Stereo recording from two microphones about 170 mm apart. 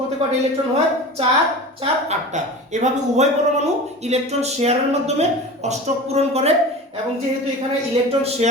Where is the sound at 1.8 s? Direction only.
45° right (ahead or behind).